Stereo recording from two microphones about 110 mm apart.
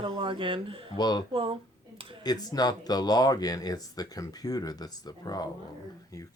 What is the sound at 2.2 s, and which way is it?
Speech, 35° left (ahead or behind).